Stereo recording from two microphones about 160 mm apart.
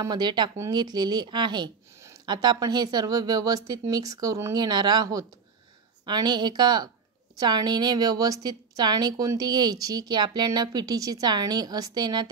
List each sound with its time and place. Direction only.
0.0 s a woman's voice: 25° right (ahead or behind)